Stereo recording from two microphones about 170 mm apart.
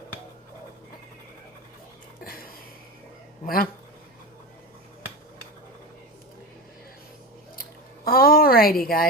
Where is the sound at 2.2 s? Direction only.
60° left (ahead or behind).